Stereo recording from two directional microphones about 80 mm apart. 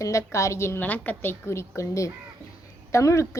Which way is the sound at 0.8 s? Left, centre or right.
Left.